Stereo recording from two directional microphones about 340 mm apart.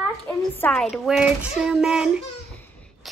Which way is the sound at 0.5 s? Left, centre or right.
Centre.